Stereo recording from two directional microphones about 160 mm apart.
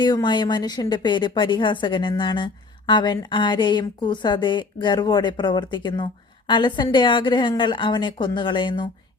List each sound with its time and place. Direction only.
0.0 s a woman's voice: 25° left (ahead or behind)